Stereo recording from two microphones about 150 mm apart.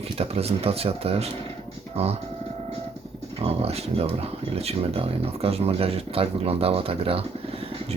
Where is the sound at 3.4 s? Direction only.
40° right (ahead or behind).